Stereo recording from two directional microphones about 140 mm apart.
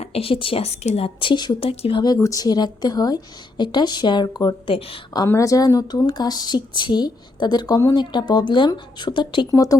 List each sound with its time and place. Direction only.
0.0 s a woman's voice: 45° left (ahead or behind)
2.1 s a woman's voice: 25° left (ahead or behind)